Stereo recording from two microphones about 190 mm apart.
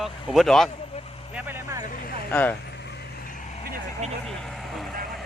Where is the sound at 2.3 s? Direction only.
10° left (ahead or behind).